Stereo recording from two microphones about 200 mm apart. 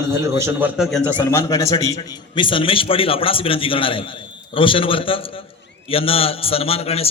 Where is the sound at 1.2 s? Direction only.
15° left (ahead or behind).